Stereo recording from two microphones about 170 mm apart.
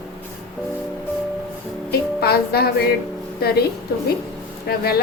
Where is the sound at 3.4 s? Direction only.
65° left (ahead or behind).